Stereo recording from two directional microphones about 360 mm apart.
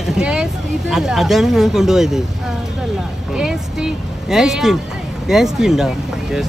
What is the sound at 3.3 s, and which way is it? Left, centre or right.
Vehicle, centre.